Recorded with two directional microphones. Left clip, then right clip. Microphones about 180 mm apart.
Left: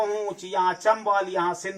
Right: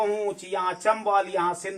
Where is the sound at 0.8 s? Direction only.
25° right (ahead or behind).